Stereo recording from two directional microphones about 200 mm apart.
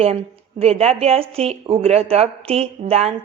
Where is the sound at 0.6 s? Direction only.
30° right (ahead or behind).